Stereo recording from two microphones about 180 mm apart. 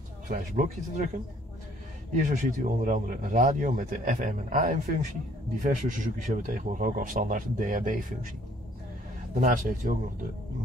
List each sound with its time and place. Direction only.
0.3 s speech: 45° right (ahead or behind)
2.1 s speech: 45° right (ahead or behind)
9.3 s speech: 50° right (ahead or behind)